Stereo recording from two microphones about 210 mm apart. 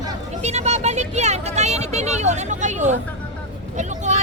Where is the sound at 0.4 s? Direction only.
30° right (ahead or behind).